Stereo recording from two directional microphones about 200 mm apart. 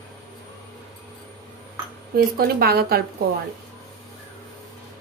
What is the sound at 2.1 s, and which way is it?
Speech, 50° right (ahead or behind).